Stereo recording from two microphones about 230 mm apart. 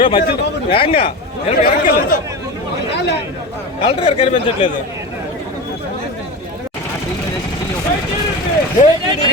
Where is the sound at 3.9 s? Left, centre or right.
Left.